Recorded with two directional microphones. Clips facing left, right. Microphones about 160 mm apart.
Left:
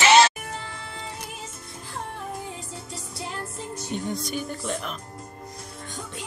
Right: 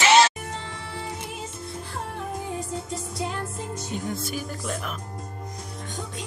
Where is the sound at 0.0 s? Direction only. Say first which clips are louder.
Left 1 dB; 75° left (ahead or behind).